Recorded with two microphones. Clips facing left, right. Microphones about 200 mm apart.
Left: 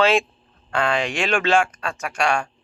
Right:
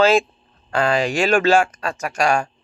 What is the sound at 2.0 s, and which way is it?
Speech, 40° right (ahead or behind).